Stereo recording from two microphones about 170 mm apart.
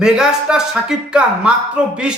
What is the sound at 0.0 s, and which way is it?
A man's voice, 5° right (ahead or behind).